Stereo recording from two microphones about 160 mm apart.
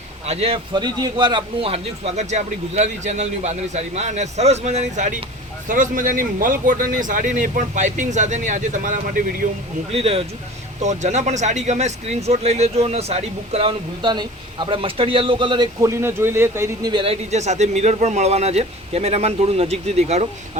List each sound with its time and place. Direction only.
0.3 s a man's voice: 40° right (ahead or behind)
5.6 s a man's voice: 55° right (ahead or behind)
9.9 s speech: 40° right (ahead or behind); by 16.9 s 15° right (ahead or behind)
16.9 s speech: 35° right (ahead or behind)